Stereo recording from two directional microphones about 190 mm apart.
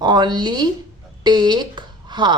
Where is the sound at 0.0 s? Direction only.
20° right (ahead or behind).